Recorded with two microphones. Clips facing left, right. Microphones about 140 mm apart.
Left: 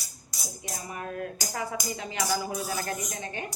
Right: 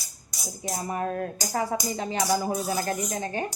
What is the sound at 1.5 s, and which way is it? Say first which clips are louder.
Speech: right 7 dB; 35° right (ahead or behind).